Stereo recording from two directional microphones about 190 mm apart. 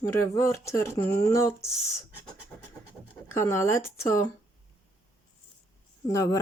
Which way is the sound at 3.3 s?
15° left (ahead or behind).